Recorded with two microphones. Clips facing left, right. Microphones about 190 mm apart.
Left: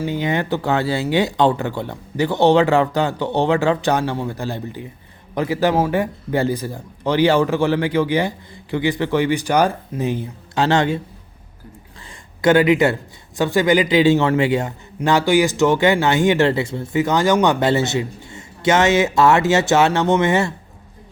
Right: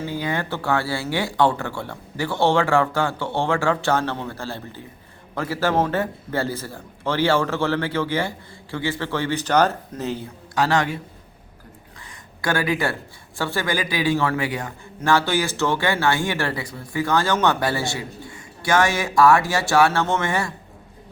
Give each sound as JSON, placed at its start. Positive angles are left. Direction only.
{"t": 0.0, "sound": "a man's voice", "side_deg": 20}
{"t": 12.4, "sound": "a man's voice", "side_deg": 20}